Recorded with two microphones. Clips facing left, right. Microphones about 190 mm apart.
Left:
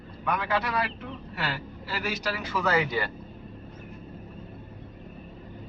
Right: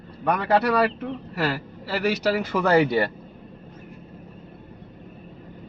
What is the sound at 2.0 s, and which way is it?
Speech, 65° right (ahead or behind).